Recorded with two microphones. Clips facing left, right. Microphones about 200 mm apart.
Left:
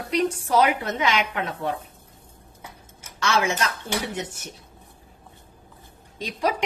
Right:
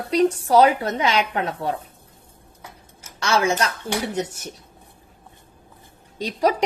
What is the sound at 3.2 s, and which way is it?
A woman's voice, 35° right (ahead or behind).